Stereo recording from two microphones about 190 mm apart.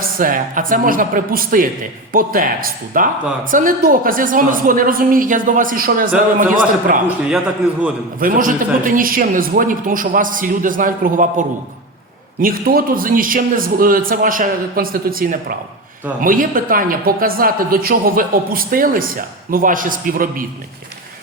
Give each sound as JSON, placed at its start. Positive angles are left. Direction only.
{"t": 0.0, "sound": "a woman's voice", "side_deg": -45}
{"t": 7.3, "sound": "a man's voice", "side_deg": -5}
{"t": 8.2, "sound": "a woman's voice", "side_deg": -45}